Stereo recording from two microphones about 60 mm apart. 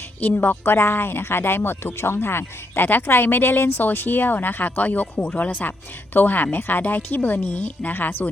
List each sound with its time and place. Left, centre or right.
0.2 s speech: left